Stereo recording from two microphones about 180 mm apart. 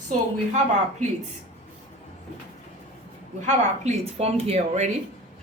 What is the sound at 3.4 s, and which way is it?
A woman's voice, 40° right (ahead or behind).